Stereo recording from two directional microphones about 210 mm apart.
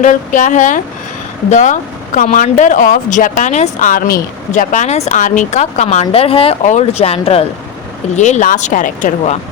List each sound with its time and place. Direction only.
0.0 s speech: 35° left (ahead or behind)